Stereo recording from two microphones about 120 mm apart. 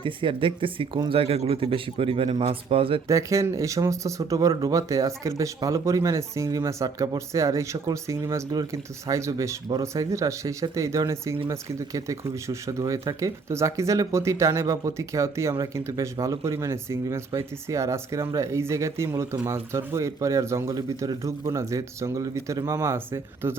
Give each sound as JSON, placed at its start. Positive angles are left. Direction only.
{"t": 0.0, "sound": "speech", "side_deg": -45}
{"t": 3.1, "sound": "speech", "side_deg": -25}